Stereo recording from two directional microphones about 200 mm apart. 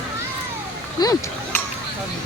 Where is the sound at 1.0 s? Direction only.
20° left (ahead or behind).